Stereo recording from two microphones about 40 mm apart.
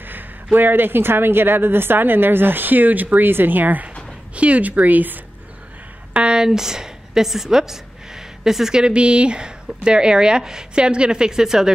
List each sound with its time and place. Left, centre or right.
0.0 s a woman's voice: right
3.3 s speech: right
4.4 s speech: right
6.1 s a sound: right
6.4 s a woman's voice: centre
8.8 s a woman's voice: right